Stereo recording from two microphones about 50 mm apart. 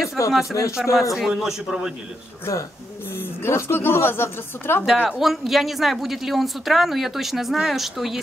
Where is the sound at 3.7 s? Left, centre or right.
Left.